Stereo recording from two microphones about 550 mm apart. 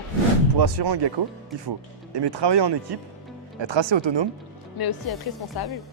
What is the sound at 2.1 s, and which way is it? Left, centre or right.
Speech, right.